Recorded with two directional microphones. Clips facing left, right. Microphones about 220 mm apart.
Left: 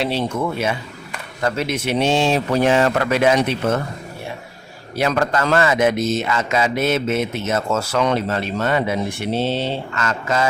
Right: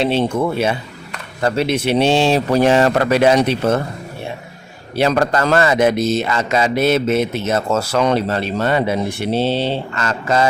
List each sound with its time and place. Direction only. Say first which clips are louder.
0.0 s speech: right 4 dB; 25° right (ahead or behind)
4.9 s speech: right 3 dB; 35° right (ahead or behind)